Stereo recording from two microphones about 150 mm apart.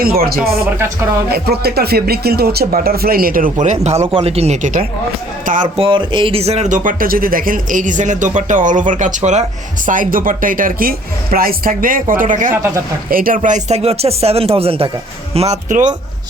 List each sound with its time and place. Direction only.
0.0 s speech: 85° right; by 4.9 s 55° right (ahead or behind)
5.7 s speech: 35° right (ahead or behind)
15.4 s speech: 50° right (ahead or behind)